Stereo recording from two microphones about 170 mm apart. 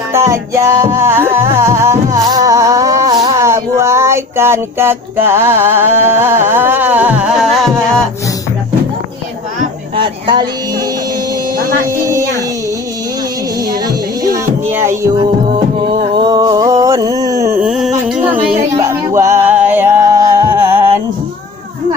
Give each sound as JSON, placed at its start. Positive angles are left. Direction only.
{"t": 0.1, "sound": "music", "side_deg": -15}
{"t": 9.9, "sound": "a sound", "side_deg": -30}
{"t": 13.6, "sound": "music", "side_deg": -20}
{"t": 16.2, "sound": "a sound", "side_deg": -25}
{"t": 17.6, "sound": "music", "side_deg": -5}
{"t": 18.8, "sound": "music", "side_deg": -15}